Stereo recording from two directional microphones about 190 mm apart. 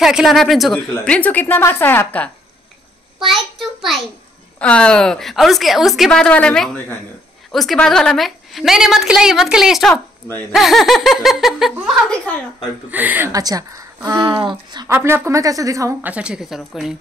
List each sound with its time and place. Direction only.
0.0 s a woman's voice: centre (ahead or behind)